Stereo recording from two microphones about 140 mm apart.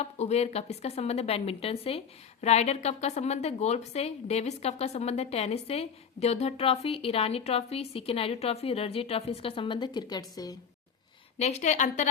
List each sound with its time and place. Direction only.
0.0 s a woman's voice: 50° left (ahead or behind); by 10.6 s 25° left (ahead or behind)
11.3 s a woman's voice: 50° left (ahead or behind)